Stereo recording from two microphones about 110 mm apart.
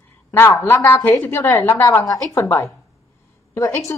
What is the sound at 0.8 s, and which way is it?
A woman's voice, 20° left (ahead or behind).